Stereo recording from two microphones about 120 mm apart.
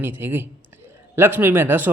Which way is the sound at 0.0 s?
20° right (ahead or behind).